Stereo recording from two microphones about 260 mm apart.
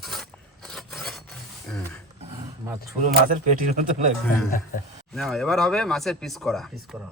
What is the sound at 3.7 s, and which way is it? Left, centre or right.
Speech, right.